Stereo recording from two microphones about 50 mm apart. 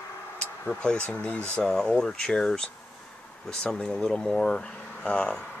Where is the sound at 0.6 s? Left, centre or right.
Centre.